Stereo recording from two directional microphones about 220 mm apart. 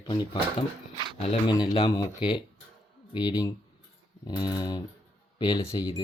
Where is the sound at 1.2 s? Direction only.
30° left (ahead or behind).